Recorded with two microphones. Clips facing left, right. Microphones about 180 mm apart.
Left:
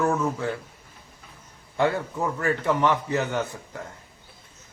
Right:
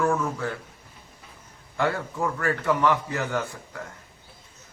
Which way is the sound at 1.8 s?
20° left (ahead or behind).